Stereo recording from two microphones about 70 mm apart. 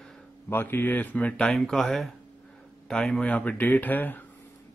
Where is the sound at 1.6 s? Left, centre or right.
Centre.